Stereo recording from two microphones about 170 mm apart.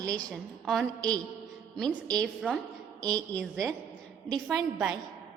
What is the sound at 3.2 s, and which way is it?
Speech, 15° right (ahead or behind).